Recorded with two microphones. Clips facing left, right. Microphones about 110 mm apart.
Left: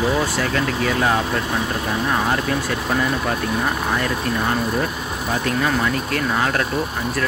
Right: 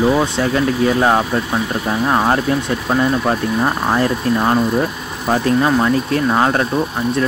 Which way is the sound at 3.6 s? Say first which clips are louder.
Right 5 dB; 30° right (ahead or behind).